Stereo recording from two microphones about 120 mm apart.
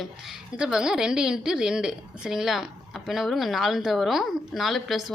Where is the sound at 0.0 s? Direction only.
5° right (ahead or behind).